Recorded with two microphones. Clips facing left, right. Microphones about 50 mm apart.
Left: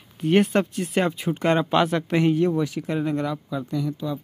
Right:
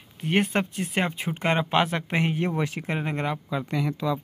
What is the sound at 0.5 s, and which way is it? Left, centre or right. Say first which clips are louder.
Speech: left 4 dB; centre.